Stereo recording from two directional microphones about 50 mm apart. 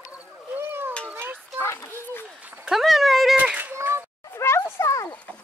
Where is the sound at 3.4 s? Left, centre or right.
Right.